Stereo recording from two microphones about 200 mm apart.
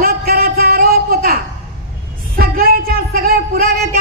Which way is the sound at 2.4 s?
50° right (ahead or behind).